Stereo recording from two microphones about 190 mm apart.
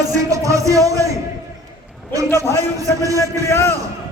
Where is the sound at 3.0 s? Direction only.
15° right (ahead or behind).